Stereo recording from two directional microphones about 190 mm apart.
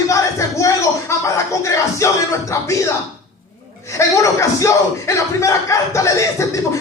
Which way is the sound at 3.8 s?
15° left (ahead or behind).